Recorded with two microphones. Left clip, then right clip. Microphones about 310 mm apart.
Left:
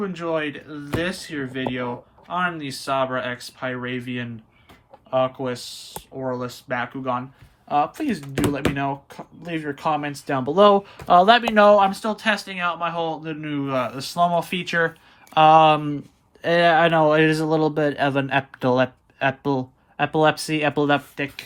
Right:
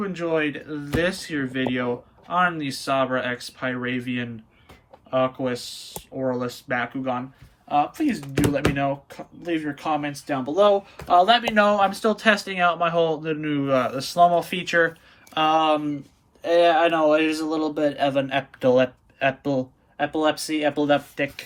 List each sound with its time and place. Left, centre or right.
0.0 s speech: centre